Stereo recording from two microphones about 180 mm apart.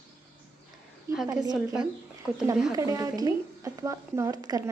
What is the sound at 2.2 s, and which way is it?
Speech, 10° right (ahead or behind).